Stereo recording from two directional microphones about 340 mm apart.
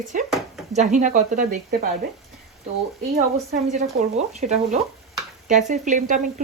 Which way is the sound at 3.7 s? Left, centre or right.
Right.